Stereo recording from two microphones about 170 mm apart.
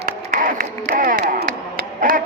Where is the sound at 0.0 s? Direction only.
55° right (ahead or behind).